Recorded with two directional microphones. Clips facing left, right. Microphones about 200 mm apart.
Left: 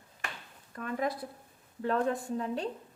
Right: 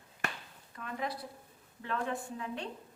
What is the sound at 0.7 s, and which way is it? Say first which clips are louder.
A woman's voice: left 6 dB; 50° left (ahead or behind).